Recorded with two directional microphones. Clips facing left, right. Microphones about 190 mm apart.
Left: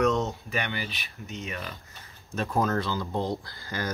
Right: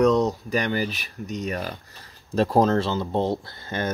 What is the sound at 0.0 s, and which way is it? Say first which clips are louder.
Speech: right 6 dB; 35° right (ahead or behind).